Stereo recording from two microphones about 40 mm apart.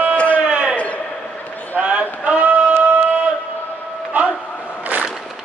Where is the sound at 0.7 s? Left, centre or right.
Left.